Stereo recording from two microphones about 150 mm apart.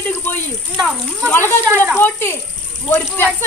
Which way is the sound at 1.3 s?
15° left (ahead or behind).